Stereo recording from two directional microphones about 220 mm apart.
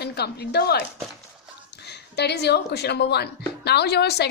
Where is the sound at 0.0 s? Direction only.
50° left (ahead or behind).